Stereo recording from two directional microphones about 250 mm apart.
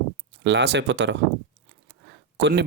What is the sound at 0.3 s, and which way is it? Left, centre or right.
Speech, right.